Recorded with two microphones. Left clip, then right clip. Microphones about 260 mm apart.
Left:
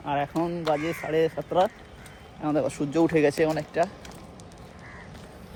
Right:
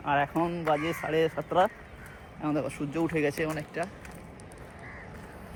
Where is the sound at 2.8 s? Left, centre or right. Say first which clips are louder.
Left 7 dB; left.